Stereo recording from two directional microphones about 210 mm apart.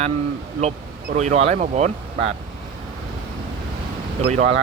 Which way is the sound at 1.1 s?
30° right (ahead or behind).